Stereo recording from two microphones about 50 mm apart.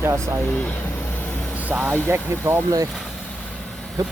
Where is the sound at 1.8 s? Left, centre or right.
Right.